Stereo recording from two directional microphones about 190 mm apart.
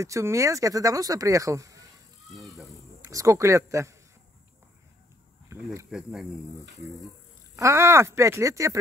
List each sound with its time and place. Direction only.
0.0 s speech: 15° right (ahead or behind)
2.2 s insect: centre (ahead or behind)
3.0 s speech: 15° right (ahead or behind)
5.5 s a sound: 15° right (ahead or behind)
5.9 s speech: 5° right (ahead or behind)
7.5 s speech: 15° right (ahead or behind)